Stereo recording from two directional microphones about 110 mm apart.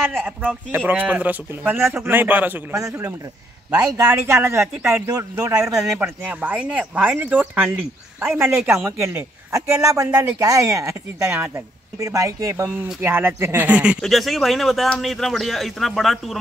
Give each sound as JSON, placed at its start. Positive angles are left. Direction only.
{"t": 0.2, "sound": "speech", "side_deg": -15}
{"t": 3.9, "sound": "speech", "side_deg": -25}
{"t": 5.9, "sound": "a man's voice", "side_deg": -15}
{"t": 11.3, "sound": "speech", "side_deg": -15}
{"t": 12.0, "sound": "speech", "side_deg": -30}
{"t": 13.7, "sound": "speech", "side_deg": -10}
{"t": 14.0, "sound": "speech", "side_deg": 0}